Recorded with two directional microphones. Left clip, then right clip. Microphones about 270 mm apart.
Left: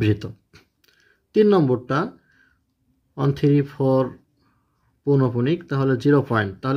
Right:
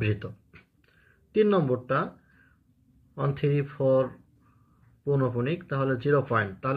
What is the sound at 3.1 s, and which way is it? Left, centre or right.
Speech, left.